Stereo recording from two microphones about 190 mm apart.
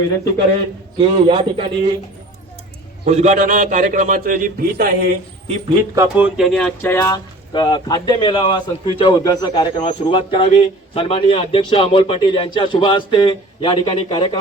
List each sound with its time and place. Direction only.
0.9 s a man's voice: 25° right (ahead or behind)
3.1 s a man's voice: 40° right (ahead or behind)
5.6 s speech: 15° right (ahead or behind); by 14.3 s 25° left (ahead or behind)